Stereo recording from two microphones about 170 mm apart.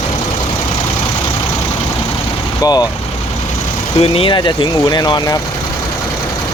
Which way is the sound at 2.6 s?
25° left (ahead or behind).